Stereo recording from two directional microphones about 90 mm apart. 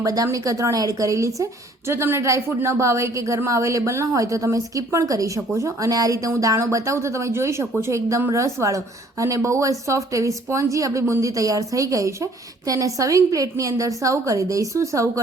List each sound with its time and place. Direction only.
0.0 s speech: 40° right (ahead or behind)